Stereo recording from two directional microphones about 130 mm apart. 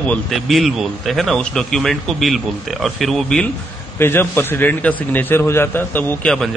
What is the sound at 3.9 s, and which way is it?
A man's voice, 15° left (ahead or behind).